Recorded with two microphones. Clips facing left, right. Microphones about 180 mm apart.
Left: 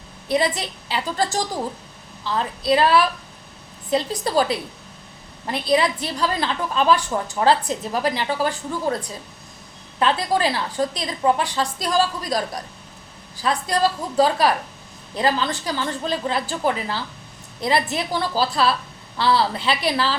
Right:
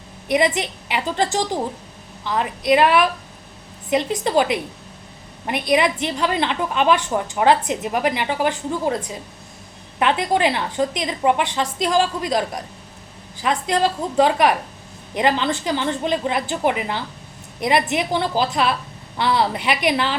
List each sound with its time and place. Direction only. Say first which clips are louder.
0.3 s a woman's voice: right 3 dB; 20° right (ahead or behind)